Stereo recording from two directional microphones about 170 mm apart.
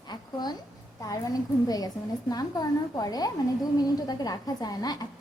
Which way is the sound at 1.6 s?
20° left (ahead or behind).